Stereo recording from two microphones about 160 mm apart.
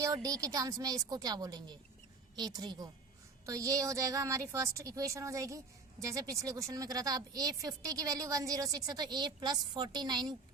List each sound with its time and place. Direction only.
0.3 s a woman's voice: 20° right (ahead or behind)